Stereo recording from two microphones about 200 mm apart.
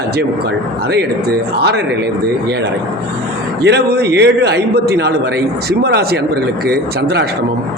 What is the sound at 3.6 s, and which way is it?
A man's voice, 55° right (ahead or behind).